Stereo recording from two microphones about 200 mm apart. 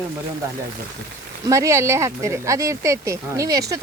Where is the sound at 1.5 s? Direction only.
15° right (ahead or behind).